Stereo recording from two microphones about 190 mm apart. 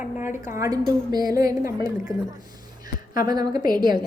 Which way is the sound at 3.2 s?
20° right (ahead or behind).